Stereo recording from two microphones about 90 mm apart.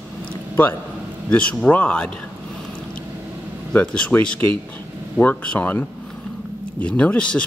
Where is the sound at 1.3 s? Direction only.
15° left (ahead or behind).